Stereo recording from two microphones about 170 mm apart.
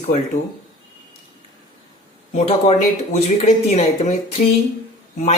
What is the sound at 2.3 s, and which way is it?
Speech, 40° left (ahead or behind).